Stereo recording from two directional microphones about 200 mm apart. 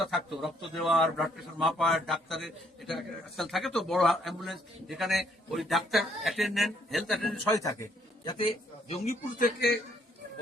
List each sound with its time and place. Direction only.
0.0 s a man's voice: centre (ahead or behind)
7.5 s a man's voice: 15° left (ahead or behind)
8.9 s speech: 35° left (ahead or behind)